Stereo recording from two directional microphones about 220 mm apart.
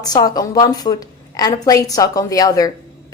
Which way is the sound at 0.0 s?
15° left (ahead or behind).